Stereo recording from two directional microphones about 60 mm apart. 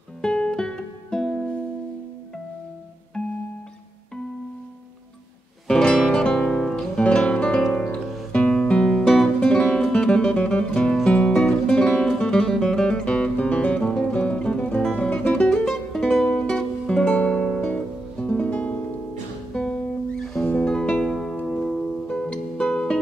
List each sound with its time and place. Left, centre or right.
0.2 s music: centre
5.7 s music: centre
7.0 s guitar: centre
8.3 s music: centre
8.9 s music: centre
9.4 s music: centre
15.6 s music: centre